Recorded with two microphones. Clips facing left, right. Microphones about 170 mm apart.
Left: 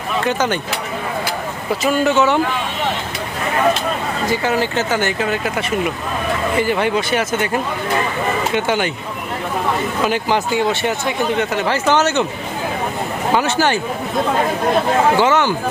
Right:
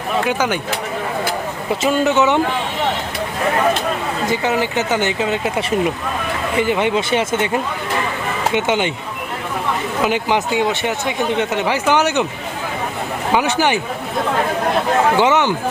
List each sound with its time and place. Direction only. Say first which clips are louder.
0.3 s speech: left 3 dB; 10° right (ahead or behind)
1.8 s speech: even; 20° right (ahead or behind)
4.3 s speech: left 1 dB; 20° right (ahead or behind)
8.5 s speech: right 2 dB; 20° right (ahead or behind)
10.0 s speech: right 2 dB; 15° right (ahead or behind)
13.3 s speech: even; 15° right (ahead or behind)
15.2 s speech: even; 20° right (ahead or behind)